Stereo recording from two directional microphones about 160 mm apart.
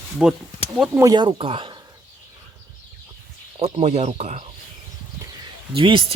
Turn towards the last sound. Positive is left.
turn(degrees=-35)  # may be behind; listen again after turning